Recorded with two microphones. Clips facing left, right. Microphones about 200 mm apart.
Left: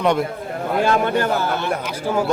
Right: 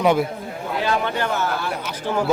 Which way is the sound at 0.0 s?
Centre (ahead or behind).